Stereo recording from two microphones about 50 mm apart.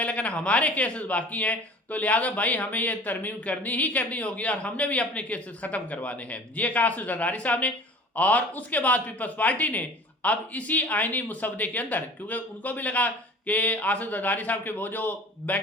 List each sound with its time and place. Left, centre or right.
0.0 s speech: left